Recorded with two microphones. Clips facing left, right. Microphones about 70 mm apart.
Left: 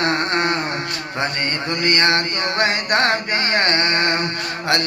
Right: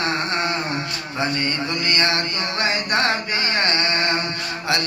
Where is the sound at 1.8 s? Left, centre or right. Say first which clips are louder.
Left 5 dB; left.